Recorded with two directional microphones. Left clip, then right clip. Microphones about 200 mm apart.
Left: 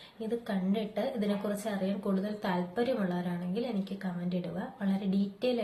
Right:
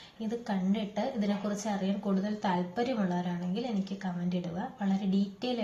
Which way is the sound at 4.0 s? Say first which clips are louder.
Right 1 dB; 5° left (ahead or behind).